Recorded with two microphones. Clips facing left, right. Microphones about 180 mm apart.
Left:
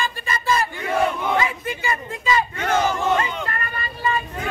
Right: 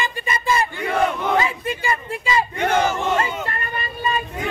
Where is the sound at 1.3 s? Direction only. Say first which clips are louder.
Right 2 dB; 30° right (ahead or behind).